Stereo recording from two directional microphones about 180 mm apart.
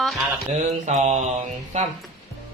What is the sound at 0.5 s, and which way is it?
Mantra, 40° right (ahead or behind).